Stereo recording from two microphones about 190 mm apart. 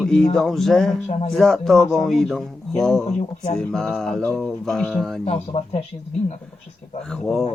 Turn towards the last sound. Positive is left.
turn(degrees=5)  # may be behind; listen again after turning